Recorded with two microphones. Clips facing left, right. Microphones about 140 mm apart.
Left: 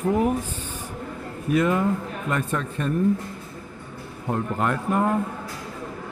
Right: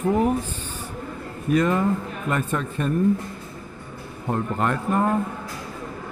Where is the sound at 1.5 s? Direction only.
5° left (ahead or behind).